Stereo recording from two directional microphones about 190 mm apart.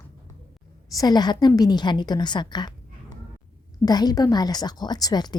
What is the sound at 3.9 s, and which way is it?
Speech, 20° left (ahead or behind).